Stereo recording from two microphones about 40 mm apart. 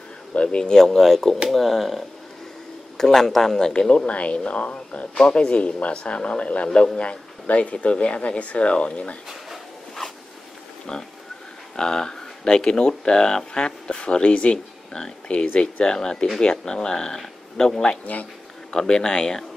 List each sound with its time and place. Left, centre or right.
0.3 s speech: left; by 3.6 s centre
3.6 s speech: centre
3.9 s speech: left
5.1 s speech: left
10.9 s speech: centre
14.9 s speech: centre
15.4 s speech: left
15.8 s speech: left
18.1 s speech: left
18.7 s speech: centre